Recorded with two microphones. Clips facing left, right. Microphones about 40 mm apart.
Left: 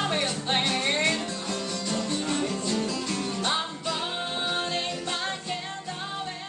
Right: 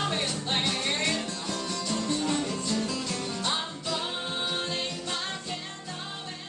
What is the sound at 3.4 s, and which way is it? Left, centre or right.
Music, centre.